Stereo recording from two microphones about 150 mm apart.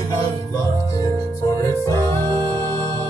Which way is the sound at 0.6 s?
25° left (ahead or behind).